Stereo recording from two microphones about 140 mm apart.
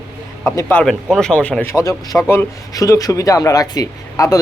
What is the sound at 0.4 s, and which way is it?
Speech, 20° left (ahead or behind).